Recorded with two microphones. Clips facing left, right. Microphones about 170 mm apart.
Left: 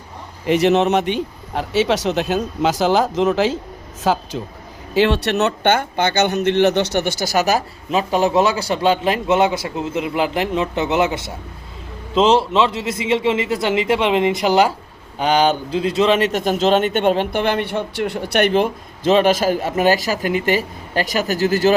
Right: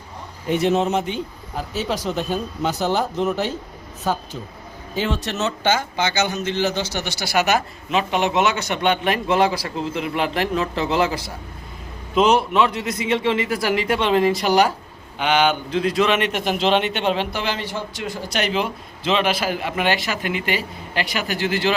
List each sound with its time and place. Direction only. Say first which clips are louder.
0.4 s a man's voice: left 4 dB; 80° left
4.9 s a man's voice: left 8 dB; 70° left (ahead or behind); by 14.7 s 20° left (ahead or behind)
15.2 s a man's voice: left 3 dB; 35° left (ahead or behind)